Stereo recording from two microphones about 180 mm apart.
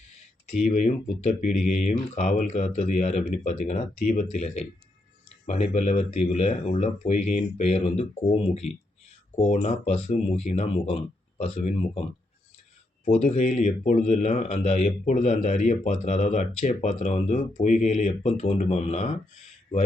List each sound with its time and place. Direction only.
0.6 s speech: 40° left (ahead or behind)
9.3 s speech: 40° left (ahead or behind)
13.1 s speech: 35° left (ahead or behind)